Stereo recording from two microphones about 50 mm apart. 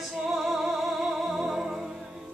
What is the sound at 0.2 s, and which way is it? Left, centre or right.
Music, centre.